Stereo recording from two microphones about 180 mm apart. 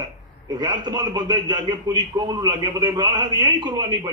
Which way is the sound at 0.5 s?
20° right (ahead or behind).